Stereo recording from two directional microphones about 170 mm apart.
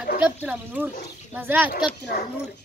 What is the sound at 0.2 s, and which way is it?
Speech, 10° right (ahead or behind).